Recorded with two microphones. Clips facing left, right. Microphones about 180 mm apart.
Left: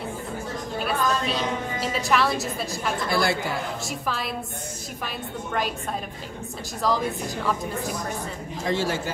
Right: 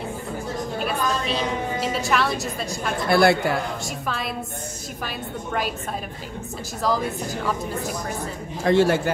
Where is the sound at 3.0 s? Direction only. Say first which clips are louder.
Right 8 dB; 60° right (ahead or behind).